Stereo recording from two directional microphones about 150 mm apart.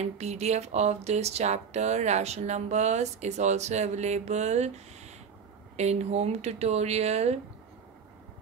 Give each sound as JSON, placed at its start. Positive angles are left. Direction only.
{"t": 0.0, "sound": "speech", "side_deg": -50}